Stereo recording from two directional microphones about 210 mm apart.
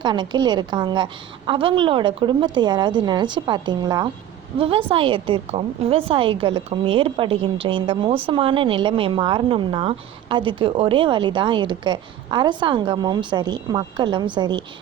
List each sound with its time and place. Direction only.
0.0 s a woman's voice: 20° right (ahead or behind)